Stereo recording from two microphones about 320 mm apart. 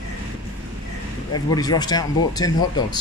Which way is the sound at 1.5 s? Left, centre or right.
Centre.